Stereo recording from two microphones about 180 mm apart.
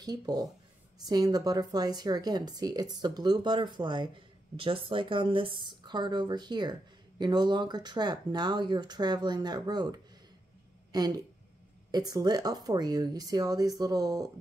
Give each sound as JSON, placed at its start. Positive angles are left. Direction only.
{"t": 0.0, "sound": "speech", "side_deg": -20}